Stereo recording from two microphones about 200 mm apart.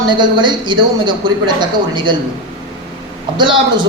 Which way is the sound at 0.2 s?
20° right (ahead or behind).